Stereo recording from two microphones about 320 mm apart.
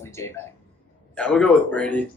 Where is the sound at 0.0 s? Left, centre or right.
Centre.